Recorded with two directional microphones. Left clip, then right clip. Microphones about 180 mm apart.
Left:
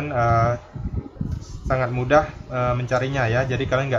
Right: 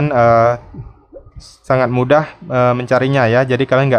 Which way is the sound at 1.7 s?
45° right (ahead or behind).